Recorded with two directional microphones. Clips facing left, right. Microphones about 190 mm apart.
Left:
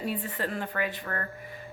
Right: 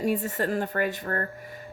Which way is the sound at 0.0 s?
45° right (ahead or behind).